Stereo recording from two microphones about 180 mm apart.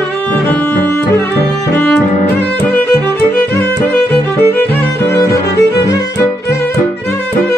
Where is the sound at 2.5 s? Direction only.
10° left (ahead or behind).